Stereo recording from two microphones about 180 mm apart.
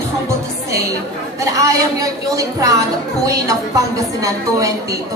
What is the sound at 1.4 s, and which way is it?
A woman's voice, 20° right (ahead or behind).